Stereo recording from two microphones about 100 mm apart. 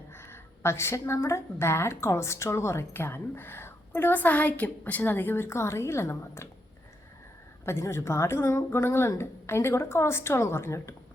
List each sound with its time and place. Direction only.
0.1 s a woman's voice: 25° left (ahead or behind)
7.6 s a woman's voice: 25° left (ahead or behind)